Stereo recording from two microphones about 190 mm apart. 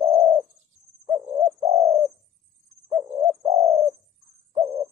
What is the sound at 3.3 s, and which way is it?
Bird, 35° right (ahead or behind).